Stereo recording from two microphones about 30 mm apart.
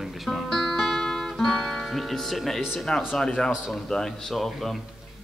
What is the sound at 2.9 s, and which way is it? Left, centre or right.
Speech, left.